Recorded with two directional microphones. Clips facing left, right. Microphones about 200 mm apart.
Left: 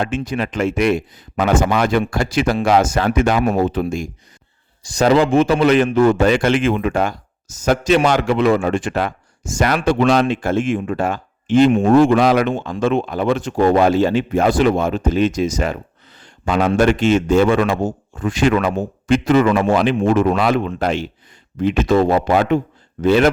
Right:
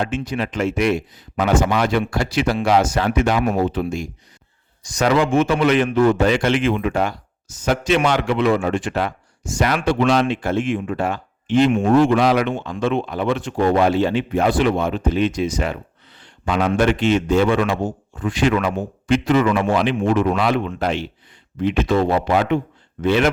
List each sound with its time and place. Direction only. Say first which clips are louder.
0.0 s a man's voice: left 2 dB; 50° left (ahead or behind)
4.8 s a man's voice: left 4 dB; 30° left (ahead or behind)